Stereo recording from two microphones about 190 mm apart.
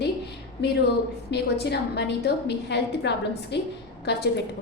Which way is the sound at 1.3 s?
60° left (ahead or behind).